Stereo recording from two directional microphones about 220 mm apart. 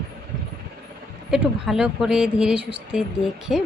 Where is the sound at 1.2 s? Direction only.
Centre (ahead or behind).